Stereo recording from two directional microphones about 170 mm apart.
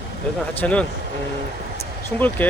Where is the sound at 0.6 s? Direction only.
10° left (ahead or behind).